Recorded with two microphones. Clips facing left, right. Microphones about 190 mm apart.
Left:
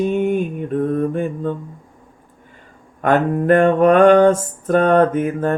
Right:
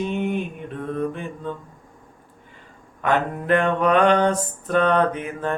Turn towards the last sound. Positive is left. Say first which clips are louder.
# left 7 dB
turn(degrees=45)  # may be behind; listen again after turning